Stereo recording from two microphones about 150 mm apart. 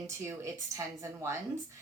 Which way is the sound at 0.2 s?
20° right (ahead or behind).